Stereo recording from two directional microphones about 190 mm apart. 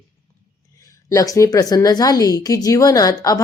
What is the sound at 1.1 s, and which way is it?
Speech, 15° left (ahead or behind).